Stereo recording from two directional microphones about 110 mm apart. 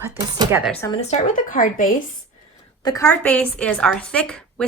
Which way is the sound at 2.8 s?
35° left (ahead or behind).